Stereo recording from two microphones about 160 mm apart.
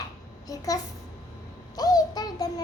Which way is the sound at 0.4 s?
20° left (ahead or behind).